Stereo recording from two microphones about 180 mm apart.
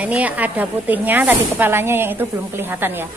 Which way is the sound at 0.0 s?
10° right (ahead or behind).